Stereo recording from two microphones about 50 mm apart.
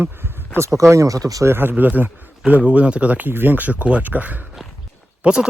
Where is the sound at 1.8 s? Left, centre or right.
Right.